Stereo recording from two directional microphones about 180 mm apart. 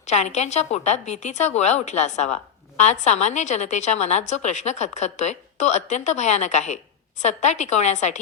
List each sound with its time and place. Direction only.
0.1 s a woman's voice: 40° left (ahead or behind)